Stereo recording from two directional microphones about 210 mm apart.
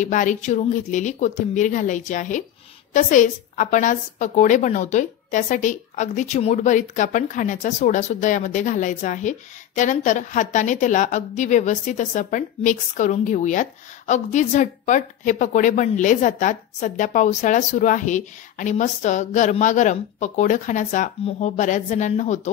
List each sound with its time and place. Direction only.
0.0 s a woman's voice: 35° left (ahead or behind)